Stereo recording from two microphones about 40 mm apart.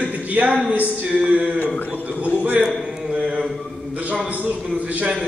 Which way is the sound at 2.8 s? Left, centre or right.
Centre.